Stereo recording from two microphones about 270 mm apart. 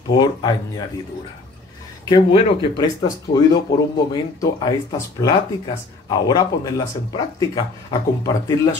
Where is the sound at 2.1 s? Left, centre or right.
Left.